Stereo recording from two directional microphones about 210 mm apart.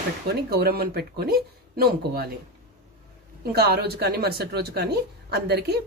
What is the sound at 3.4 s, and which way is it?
Speech, 50° right (ahead or behind).